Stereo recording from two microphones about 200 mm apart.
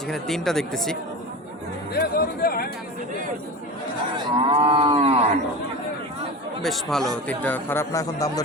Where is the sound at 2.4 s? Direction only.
45° left (ahead or behind).